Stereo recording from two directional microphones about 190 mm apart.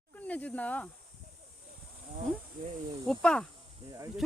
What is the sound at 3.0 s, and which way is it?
Speech, 5° left (ahead or behind).